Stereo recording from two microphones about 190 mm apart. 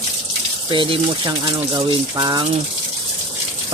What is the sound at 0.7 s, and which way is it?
Speech, 25° right (ahead or behind).